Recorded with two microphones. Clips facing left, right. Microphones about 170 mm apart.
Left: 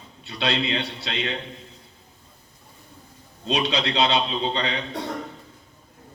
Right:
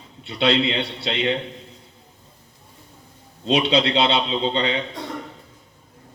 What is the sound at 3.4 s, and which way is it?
A man's voice, 25° right (ahead or behind).